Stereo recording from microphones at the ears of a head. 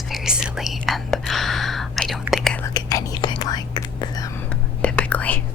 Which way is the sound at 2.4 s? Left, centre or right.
Left.